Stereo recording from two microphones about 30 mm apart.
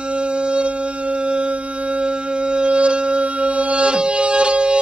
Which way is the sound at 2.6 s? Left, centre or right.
Right.